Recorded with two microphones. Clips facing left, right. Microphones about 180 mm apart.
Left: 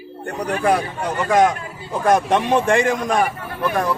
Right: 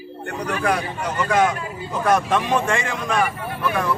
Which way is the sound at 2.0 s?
35° left (ahead or behind).